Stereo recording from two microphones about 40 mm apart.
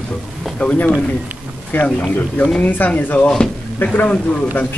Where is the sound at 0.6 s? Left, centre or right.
Left.